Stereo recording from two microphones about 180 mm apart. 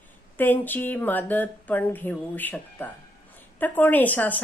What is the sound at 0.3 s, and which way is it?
Speech, 10° left (ahead or behind).